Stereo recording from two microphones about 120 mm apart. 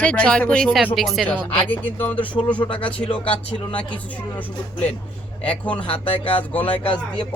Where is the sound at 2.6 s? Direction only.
45° left (ahead or behind).